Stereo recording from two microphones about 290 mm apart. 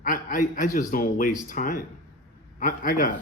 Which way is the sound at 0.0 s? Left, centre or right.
Left.